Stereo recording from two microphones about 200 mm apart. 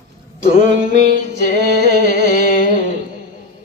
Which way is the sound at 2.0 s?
45° left (ahead or behind).